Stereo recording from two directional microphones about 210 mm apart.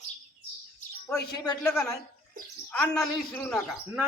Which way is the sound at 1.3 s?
15° left (ahead or behind).